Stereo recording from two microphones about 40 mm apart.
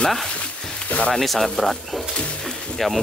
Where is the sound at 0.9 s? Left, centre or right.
Left.